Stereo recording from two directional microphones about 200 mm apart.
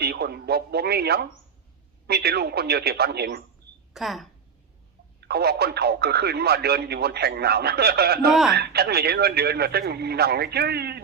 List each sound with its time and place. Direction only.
0.0 s speech: 55° right (ahead or behind)
3.9 s a woman's voice: centre (ahead or behind)
5.3 s speech: 55° right (ahead or behind)
8.3 s a woman's voice: centre (ahead or behind)
8.5 s speech: 50° right (ahead or behind)